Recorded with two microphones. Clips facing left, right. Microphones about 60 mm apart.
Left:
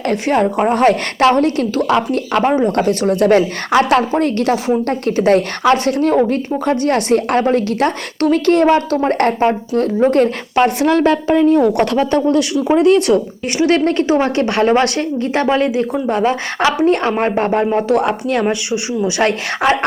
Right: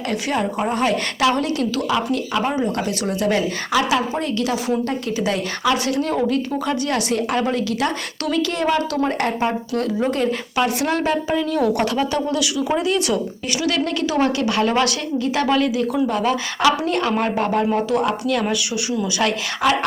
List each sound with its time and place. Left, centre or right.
0.1 s a woman's voice: left
14.7 s a woman's voice: left
17.8 s a woman's voice: left
18.3 s a woman's voice: left